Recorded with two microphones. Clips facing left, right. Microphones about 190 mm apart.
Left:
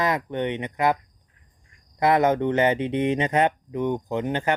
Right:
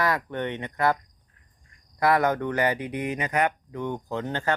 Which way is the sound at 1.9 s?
20° left (ahead or behind).